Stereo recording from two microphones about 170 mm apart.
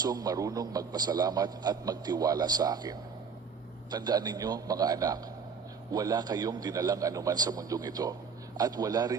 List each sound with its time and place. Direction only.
0.0 s a man's voice: 25° right (ahead or behind)